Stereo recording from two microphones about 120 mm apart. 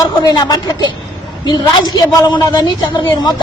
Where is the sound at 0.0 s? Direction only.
35° left (ahead or behind).